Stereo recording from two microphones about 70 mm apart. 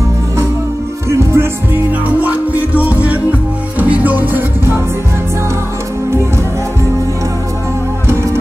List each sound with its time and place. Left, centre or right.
1.1 s music: right
2.0 s music: right
8.1 s music: right